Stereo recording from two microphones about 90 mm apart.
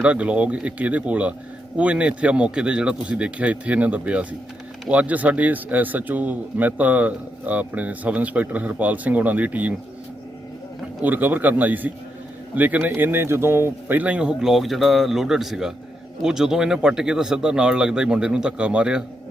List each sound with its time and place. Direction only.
0.0 s a man's voice: 15° right (ahead or behind)
11.0 s a man's voice: 20° right (ahead or behind)